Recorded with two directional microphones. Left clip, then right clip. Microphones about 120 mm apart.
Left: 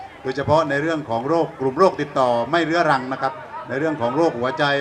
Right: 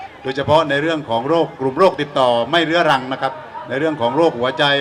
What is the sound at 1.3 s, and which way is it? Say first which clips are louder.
Speech: right 2 dB; 45° right (ahead or behind).